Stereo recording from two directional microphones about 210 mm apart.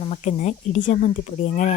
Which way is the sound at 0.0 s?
35° left (ahead or behind).